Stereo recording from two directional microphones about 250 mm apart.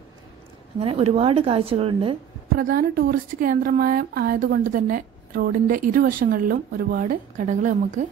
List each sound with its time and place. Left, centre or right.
0.7 s a woman's voice: right
2.5 s a woman's voice: right